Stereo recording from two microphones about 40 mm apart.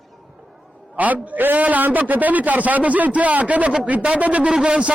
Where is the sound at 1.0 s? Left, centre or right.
Right.